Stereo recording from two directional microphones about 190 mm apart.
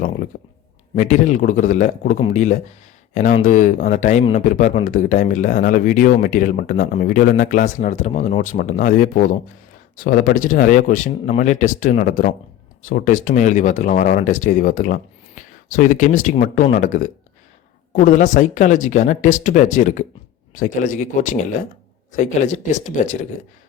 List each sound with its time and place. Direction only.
0.3 s speech: 50° left (ahead or behind)
0.9 s speech: 40° left (ahead or behind)